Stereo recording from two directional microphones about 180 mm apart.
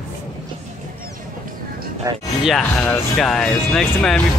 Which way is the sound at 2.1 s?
15° right (ahead or behind).